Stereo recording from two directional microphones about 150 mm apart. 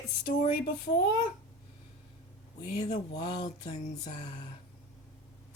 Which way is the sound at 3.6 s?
50° left (ahead or behind).